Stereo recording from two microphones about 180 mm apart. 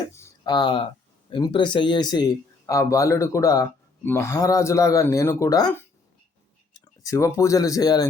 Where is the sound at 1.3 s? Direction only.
25° left (ahead or behind).